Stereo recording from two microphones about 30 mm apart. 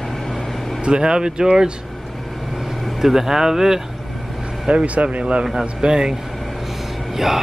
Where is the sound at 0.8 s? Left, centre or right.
Right.